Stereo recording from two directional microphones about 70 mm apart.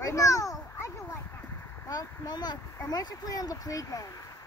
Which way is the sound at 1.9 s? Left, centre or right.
Left.